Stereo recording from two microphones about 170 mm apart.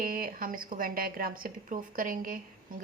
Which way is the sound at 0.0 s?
55° right (ahead or behind).